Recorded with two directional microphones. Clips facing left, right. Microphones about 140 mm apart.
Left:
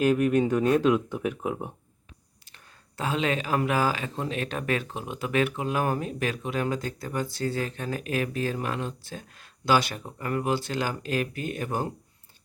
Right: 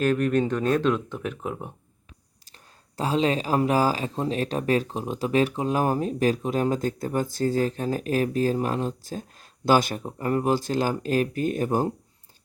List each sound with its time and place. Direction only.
0.0 s speech: 10° left (ahead or behind)
2.5 s speech: 35° right (ahead or behind)
10.0 s speech: 30° right (ahead or behind)